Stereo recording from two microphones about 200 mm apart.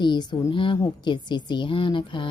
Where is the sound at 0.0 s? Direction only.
20° left (ahead or behind).